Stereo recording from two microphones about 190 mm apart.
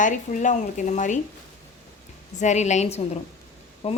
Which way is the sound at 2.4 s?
40° left (ahead or behind).